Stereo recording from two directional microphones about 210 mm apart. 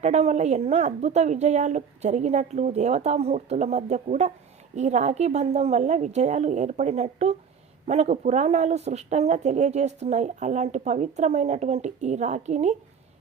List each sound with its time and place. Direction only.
0.0 s speech: 30° right (ahead or behind)